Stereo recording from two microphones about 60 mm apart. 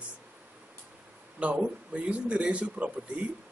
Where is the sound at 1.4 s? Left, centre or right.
Right.